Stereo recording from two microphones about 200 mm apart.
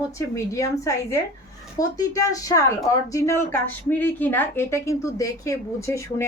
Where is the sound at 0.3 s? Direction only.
15° left (ahead or behind).